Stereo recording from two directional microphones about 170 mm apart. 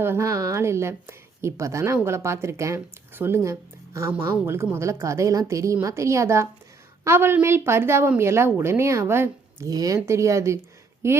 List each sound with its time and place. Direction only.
0.0 s a woman's voice: 15° right (ahead or behind)